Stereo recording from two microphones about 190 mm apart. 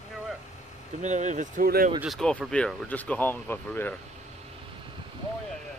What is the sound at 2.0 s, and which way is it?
Speech, centre (ahead or behind).